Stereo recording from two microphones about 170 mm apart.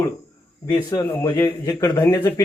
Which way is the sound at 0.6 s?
20° left (ahead or behind).